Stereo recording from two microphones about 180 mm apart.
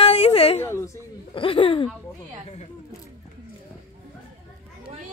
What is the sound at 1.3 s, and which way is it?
Speech, 30° left (ahead or behind).